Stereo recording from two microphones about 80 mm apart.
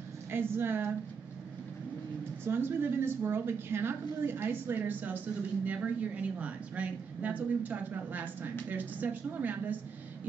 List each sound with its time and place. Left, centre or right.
0.3 s a woman's voice: right
2.4 s a woman's voice: right